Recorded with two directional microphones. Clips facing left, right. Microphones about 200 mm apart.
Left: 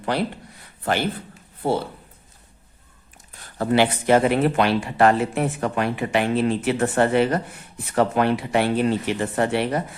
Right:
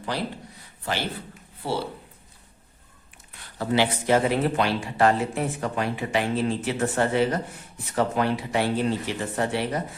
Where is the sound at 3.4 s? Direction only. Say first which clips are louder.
Left 4 dB; 55° left (ahead or behind).